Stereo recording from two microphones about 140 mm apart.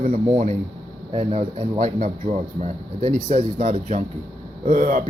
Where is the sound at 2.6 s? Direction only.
55° right (ahead or behind).